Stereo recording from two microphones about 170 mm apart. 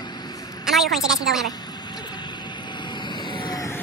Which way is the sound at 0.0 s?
25° left (ahead or behind).